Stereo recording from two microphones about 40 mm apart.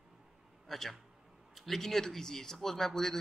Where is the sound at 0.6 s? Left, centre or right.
Centre.